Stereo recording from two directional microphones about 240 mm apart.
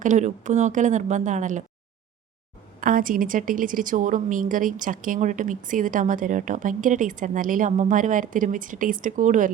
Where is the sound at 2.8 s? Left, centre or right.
Right.